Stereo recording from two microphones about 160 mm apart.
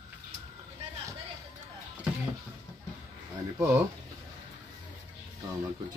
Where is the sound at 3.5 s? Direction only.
15° right (ahead or behind).